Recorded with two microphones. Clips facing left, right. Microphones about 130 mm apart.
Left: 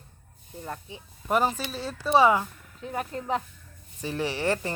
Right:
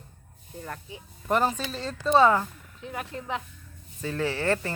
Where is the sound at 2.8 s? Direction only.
35° left (ahead or behind).